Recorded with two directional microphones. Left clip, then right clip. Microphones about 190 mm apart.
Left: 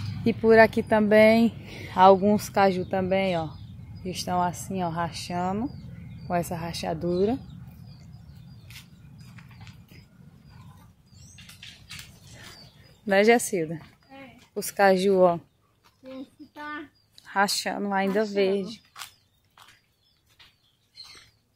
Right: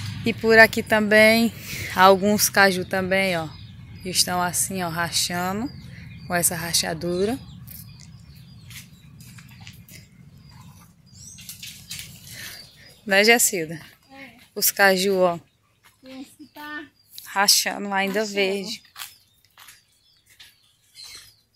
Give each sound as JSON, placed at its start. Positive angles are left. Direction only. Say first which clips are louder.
{"t": 0.2, "sound": "speech", "louder": "right 3 dB", "side_deg": 15}
{"t": 13.1, "sound": "speech", "louder": "right 3 dB", "side_deg": 15}
{"t": 17.2, "sound": "speech", "louder": "right 5 dB", "side_deg": 20}